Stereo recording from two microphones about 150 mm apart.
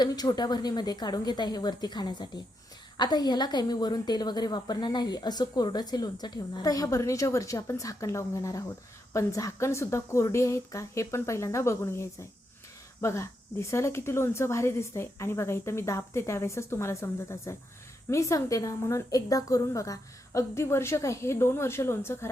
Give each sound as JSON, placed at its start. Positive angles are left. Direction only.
{"t": 0.0, "sound": "a woman's voice", "side_deg": 25}